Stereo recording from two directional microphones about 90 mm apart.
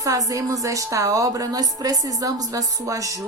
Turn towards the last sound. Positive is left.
turn(degrees=-40)  # may be behind; listen again after turning